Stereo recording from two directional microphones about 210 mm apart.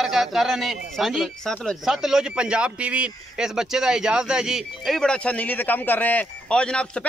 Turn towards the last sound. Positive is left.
turn(degrees=5)  # may be behind; listen again after turning